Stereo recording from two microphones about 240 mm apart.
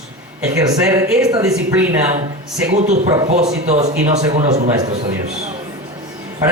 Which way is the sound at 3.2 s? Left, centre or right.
Right.